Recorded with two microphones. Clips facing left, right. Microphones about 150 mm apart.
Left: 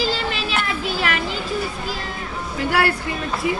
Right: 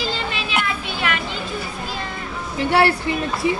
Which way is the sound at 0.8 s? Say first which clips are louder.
Left 2 dB; 40° left (ahead or behind).